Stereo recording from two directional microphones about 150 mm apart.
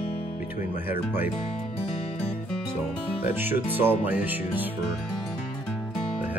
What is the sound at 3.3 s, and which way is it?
Speech, 15° right (ahead or behind).